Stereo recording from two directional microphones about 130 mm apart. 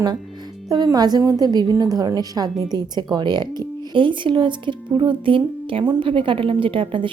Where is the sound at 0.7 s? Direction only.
30° right (ahead or behind).